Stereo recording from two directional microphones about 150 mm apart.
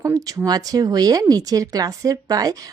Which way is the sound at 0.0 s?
20° right (ahead or behind).